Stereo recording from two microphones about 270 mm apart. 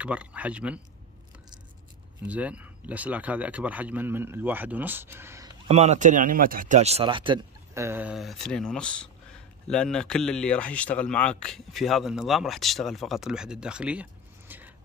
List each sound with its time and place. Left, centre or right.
0.0 s speech: centre
2.2 s speech: centre
5.7 s speech: right; by 14.0 s centre
14.5 s vehicle: centre